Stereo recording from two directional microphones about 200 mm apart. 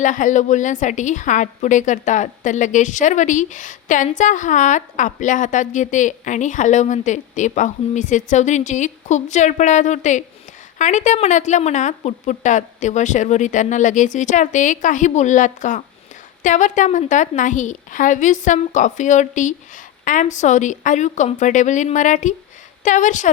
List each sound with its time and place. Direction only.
0.0 s a woman's voice: 40° left (ahead or behind)